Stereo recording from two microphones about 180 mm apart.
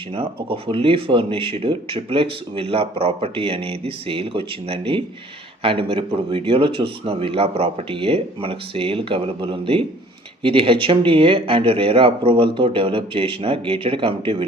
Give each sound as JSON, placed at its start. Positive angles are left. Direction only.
{"t": 0.2, "sound": "speech", "side_deg": -30}